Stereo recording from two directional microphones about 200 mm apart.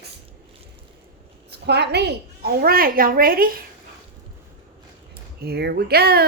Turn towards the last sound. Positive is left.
turn(degrees=-50)  # may be behind; listen again after turning